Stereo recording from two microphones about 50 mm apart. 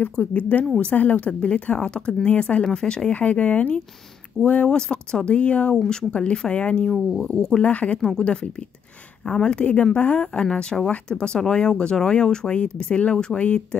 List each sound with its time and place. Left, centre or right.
0.1 s speech: left
3.1 s speech: left
7.6 s speech: left
9.3 s speech: centre